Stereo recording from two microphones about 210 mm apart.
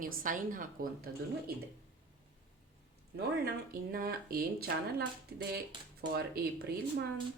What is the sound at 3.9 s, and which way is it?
Speech, 45° right (ahead or behind).